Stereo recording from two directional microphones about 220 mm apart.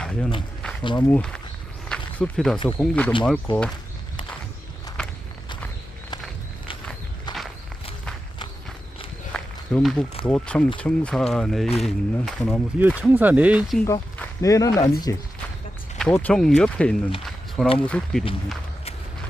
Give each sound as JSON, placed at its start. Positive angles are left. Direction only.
{"t": 0.0, "sound": "run", "side_deg": 5}
{"t": 0.8, "sound": "speech", "side_deg": 20}
{"t": 1.1, "sound": "speech", "side_deg": 5}
{"t": 1.9, "sound": "a sound", "side_deg": 5}
{"t": 2.6, "sound": "speech", "side_deg": 5}
{"t": 3.5, "sound": "speech", "side_deg": 20}
{"t": 5.0, "sound": "walk", "side_deg": 5}
{"t": 7.3, "sound": "walk", "side_deg": 20}
{"t": 9.3, "sound": "a sound", "side_deg": 5}
{"t": 10.2, "sound": "speech", "side_deg": 5}
{"t": 13.8, "sound": "speech", "side_deg": 15}